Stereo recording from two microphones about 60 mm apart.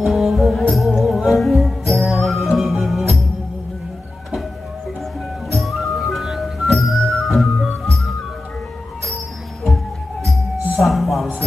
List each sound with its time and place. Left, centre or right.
0.0 s music: centre
5.5 s music: centre
10.8 s music: centre